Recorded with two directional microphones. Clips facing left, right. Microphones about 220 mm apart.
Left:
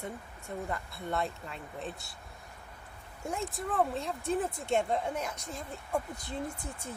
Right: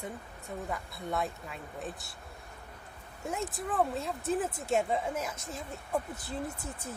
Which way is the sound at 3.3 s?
Centre (ahead or behind).